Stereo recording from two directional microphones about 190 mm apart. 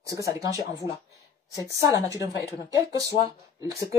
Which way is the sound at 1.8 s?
20° right (ahead or behind).